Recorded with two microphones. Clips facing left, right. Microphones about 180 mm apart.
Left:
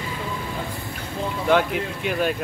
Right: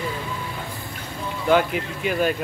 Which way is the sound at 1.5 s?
Centre (ahead or behind).